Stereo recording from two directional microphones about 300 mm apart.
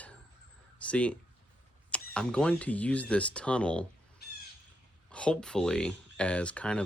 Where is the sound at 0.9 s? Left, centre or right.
Centre.